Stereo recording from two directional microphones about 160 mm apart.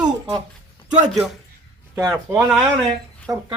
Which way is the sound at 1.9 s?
15° right (ahead or behind).